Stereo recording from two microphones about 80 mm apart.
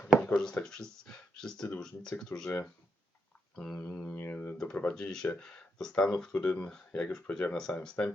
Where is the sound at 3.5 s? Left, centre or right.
Centre.